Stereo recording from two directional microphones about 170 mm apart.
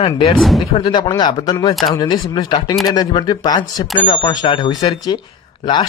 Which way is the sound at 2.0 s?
25° left (ahead or behind).